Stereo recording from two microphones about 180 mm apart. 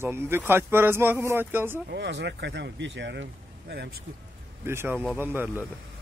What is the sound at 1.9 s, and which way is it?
Speech, 75° right (ahead or behind).